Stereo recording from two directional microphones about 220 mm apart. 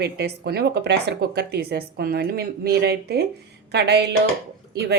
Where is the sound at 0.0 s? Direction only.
50° right (ahead or behind).